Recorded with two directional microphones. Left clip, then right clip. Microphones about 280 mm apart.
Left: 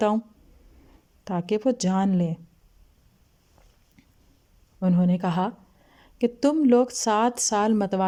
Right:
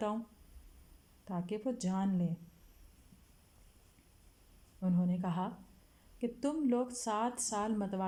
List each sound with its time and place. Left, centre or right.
1.2 s a woman's voice: left
4.8 s a woman's voice: left